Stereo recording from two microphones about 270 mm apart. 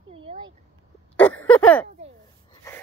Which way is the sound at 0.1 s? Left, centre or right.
Centre.